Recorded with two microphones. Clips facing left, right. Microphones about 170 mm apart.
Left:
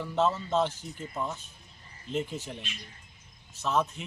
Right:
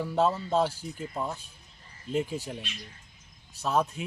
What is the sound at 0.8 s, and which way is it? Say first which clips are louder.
Speech: right 1 dB; 10° right (ahead or behind).